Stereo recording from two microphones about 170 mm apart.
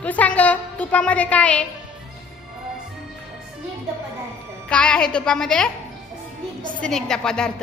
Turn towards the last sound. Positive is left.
turn(degrees=5)  # may be behind; listen again after turning